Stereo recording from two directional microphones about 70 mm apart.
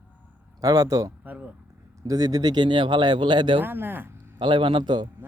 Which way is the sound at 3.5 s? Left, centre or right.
Right.